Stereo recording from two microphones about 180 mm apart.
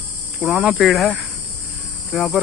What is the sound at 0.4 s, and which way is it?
Speech, 5° right (ahead or behind).